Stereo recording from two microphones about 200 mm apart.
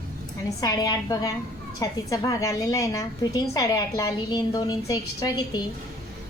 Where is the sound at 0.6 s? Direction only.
20° left (ahead or behind).